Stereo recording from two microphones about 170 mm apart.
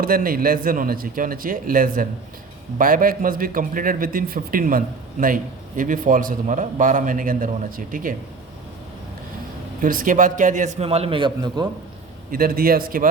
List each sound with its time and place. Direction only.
0.0 s a man's voice: 55° right (ahead or behind)
9.8 s a man's voice: 55° right (ahead or behind); by 11.7 s 25° right (ahead or behind)
12.3 s a man's voice: 60° right (ahead or behind)